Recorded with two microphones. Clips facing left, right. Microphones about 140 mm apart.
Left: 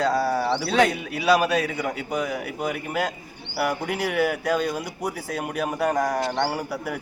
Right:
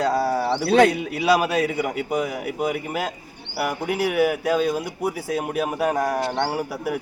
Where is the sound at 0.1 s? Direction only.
25° right (ahead or behind).